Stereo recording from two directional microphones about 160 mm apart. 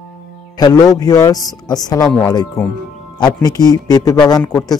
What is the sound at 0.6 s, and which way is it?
Speech, 25° left (ahead or behind).